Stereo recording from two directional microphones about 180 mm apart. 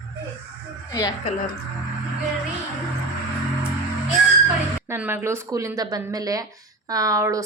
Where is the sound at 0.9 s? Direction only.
20° left (ahead or behind).